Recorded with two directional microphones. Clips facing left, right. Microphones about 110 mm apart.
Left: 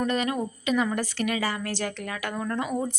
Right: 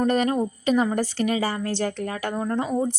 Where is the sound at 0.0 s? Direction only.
40° right (ahead or behind).